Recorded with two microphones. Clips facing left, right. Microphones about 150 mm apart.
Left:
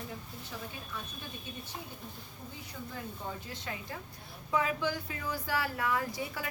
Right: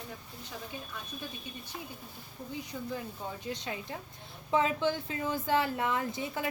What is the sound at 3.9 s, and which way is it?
Speech, 25° right (ahead or behind).